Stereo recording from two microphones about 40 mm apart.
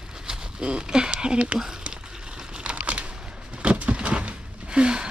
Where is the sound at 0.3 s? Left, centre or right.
Right.